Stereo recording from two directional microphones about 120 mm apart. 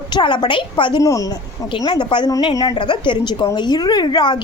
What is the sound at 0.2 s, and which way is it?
A woman's voice, 40° left (ahead or behind).